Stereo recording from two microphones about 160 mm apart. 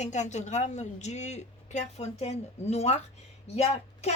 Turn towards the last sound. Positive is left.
turn(degrees=40)  # may be behind; listen again after turning